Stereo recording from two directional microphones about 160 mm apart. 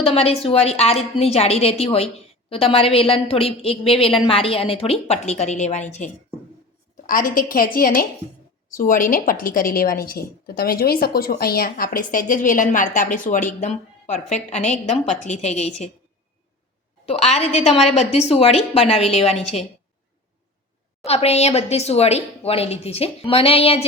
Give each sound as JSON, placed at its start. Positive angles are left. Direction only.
{"t": 0.0, "sound": "speech", "side_deg": 40}
{"t": 7.1, "sound": "a woman's voice", "side_deg": 60}
{"t": 17.1, "sound": "speech", "side_deg": 40}
{"t": 21.0, "sound": "speech", "side_deg": 40}